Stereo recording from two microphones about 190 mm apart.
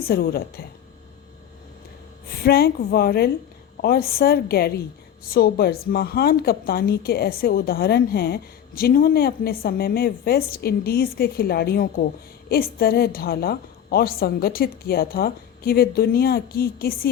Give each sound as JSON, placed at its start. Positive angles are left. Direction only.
{"t": 0.1, "sound": "a woman's voice", "side_deg": 55}
{"t": 2.4, "sound": "a woman's voice", "side_deg": 55}